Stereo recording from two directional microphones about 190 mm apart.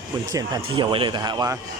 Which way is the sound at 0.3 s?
20° right (ahead or behind).